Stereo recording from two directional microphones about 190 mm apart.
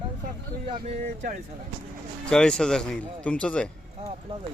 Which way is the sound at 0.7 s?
40° right (ahead or behind).